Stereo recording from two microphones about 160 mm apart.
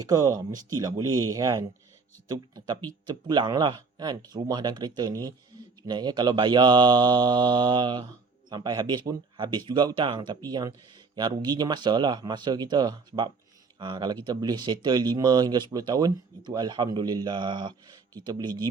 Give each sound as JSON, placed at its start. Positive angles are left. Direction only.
{"t": 0.0, "sound": "speech", "side_deg": -25}